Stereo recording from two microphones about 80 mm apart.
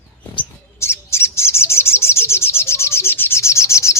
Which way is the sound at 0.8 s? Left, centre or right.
Left.